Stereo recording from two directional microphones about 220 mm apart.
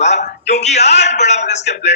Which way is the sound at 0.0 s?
30° left (ahead or behind).